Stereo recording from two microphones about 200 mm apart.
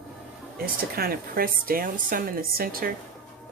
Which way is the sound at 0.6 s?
50° right (ahead or behind).